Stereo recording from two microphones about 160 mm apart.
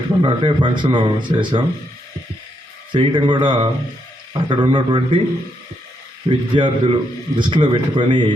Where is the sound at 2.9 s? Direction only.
30° right (ahead or behind).